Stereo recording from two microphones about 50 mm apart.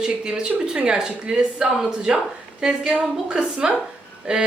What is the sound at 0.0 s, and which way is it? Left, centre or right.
Speech, centre.